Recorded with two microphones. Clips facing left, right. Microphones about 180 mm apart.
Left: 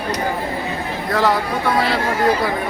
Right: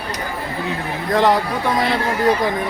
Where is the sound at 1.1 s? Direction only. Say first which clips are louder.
Right 2 dB; 15° right (ahead or behind).